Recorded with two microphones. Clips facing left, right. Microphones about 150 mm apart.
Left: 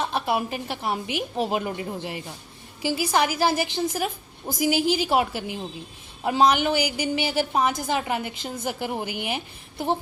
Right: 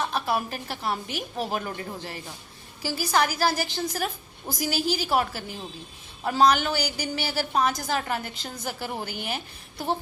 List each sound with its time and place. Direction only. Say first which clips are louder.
0.0 s a woman's voice: left 2 dB; 20° left (ahead or behind)